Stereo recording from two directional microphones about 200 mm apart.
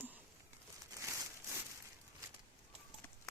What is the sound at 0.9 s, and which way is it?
Crumpling, 15° right (ahead or behind).